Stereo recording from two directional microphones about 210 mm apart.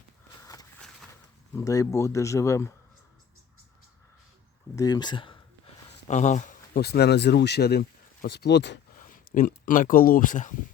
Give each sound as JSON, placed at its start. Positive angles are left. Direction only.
{"t": 1.5, "sound": "speech", "side_deg": 15}
{"t": 4.7, "sound": "speech", "side_deg": 15}
{"t": 6.1, "sound": "speech", "side_deg": 35}
{"t": 9.0, "sound": "speech", "side_deg": 40}